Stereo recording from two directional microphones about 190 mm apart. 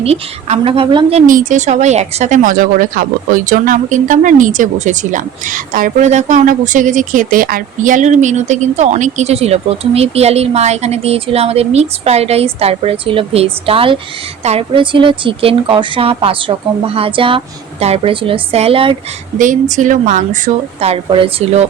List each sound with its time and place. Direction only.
0.0 s speech: 35° right (ahead or behind)
1.3 s speech: 45° right (ahead or behind)
19.4 s speech: 40° right (ahead or behind)